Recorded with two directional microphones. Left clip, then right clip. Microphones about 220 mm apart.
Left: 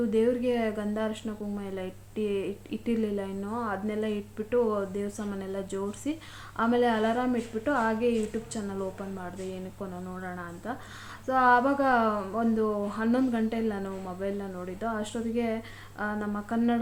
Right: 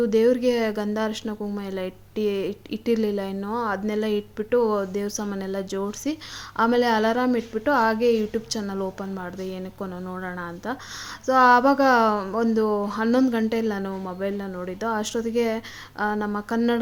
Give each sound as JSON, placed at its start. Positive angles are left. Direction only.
{"t": 0.1, "sound": "speech", "side_deg": -50}
{"t": 11.3, "sound": "speech", "side_deg": -50}